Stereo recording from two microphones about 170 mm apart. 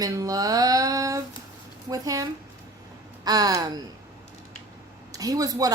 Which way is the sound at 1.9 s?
20° right (ahead or behind).